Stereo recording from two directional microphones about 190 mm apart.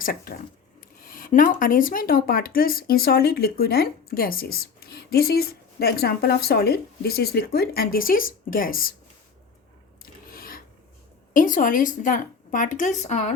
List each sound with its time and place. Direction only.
0.0 s speech: 50° left (ahead or behind)
10.0 s filing: 50° left (ahead or behind)
11.3 s speech: 45° left (ahead or behind)